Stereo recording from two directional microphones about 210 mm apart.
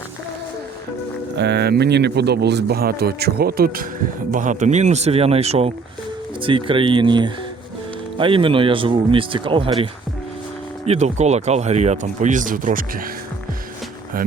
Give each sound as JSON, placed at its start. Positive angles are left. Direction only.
{"t": 1.4, "sound": "speech", "side_deg": -55}
{"t": 10.8, "sound": "speech", "side_deg": -30}